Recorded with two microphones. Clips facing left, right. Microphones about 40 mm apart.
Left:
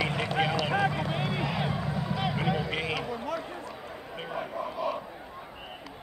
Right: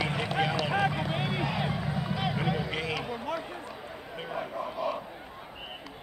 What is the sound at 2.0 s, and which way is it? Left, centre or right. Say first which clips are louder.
Vehicle: even; centre.